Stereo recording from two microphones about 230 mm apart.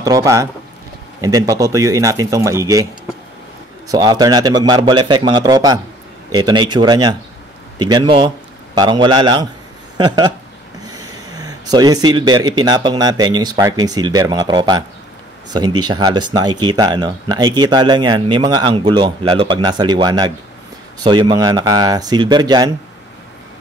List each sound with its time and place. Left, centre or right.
0.0 s speech: centre
3.9 s speech: centre